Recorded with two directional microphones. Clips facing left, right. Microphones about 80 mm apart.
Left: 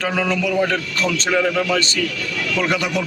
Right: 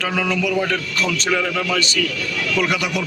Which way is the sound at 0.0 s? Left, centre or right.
Left.